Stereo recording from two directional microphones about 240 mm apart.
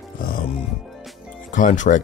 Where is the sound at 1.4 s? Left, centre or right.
Left.